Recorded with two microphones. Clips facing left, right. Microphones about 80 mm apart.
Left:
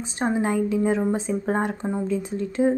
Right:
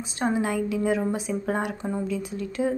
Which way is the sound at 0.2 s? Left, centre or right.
Left.